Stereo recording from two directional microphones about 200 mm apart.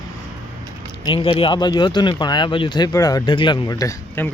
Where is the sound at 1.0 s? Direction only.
25° left (ahead or behind).